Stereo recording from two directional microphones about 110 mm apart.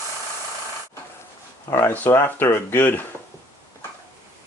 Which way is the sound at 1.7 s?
20° left (ahead or behind).